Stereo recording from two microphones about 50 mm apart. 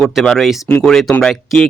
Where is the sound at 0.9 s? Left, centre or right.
Centre.